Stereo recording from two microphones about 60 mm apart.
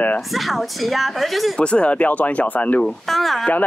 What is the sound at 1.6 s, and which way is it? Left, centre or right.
Speech, centre.